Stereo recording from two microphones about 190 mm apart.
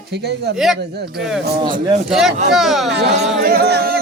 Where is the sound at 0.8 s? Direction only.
60° right (ahead or behind).